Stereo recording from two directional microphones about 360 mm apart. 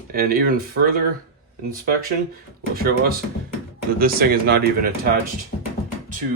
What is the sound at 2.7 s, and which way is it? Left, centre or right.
Speech, right.